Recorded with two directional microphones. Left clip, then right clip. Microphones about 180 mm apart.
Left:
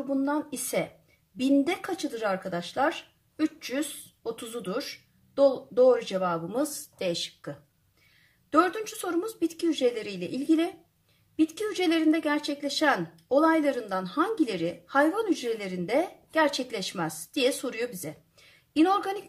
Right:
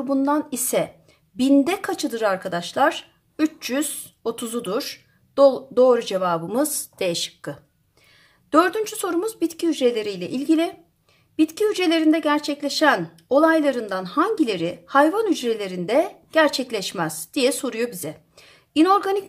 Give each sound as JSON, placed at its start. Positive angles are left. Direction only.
{"t": 0.1, "sound": "a woman's voice", "side_deg": -35}